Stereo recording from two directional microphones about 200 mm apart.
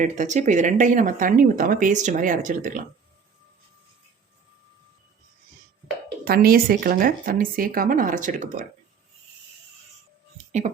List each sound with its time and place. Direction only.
0.0 s speech: 35° right (ahead or behind)
6.2 s a woman's voice: 50° right (ahead or behind)